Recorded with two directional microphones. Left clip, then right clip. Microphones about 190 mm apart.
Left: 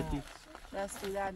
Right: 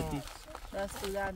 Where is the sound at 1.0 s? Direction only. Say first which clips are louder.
Right 1 dB; 45° right (ahead or behind).